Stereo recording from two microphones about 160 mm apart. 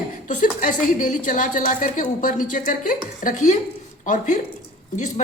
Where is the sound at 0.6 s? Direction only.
55° left (ahead or behind).